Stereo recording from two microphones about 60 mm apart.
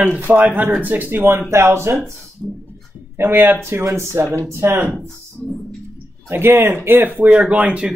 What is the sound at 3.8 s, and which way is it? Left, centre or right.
Speech, right.